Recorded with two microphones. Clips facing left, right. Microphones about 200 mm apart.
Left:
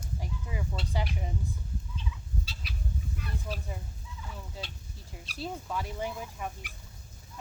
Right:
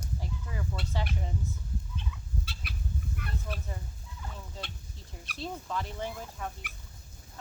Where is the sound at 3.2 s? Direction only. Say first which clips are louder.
Even; 55° right (ahead or behind).